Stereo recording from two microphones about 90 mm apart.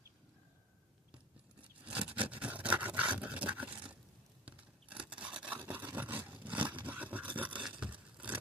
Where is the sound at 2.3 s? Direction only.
15° right (ahead or behind).